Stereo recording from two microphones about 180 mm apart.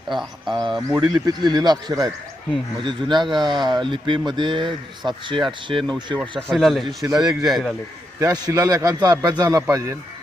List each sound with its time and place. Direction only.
0.1 s a man's voice: centre (ahead or behind)
0.5 s speech: 25° right (ahead or behind)
6.5 s a man's voice: centre (ahead or behind)
6.8 s speech: 20° right (ahead or behind)
7.2 s a man's voice: centre (ahead or behind)
8.2 s speech: 20° right (ahead or behind)